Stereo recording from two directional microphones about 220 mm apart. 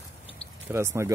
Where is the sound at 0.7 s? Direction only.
10° right (ahead or behind).